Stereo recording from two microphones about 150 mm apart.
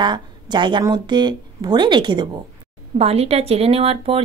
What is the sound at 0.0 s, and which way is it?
A woman's voice, 30° right (ahead or behind).